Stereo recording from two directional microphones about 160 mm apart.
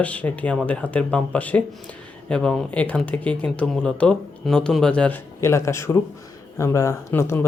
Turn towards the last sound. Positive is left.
turn(degrees=15)  # may be behind; listen again after turning